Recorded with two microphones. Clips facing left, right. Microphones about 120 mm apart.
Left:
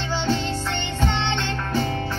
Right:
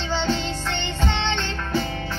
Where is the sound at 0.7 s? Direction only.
50° left (ahead or behind).